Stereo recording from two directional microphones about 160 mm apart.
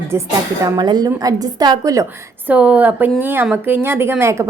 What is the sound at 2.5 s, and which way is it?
A woman's voice, 10° right (ahead or behind).